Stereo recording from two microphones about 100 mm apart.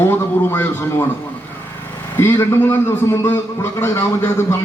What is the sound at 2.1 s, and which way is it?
A man's voice, 25° left (ahead or behind).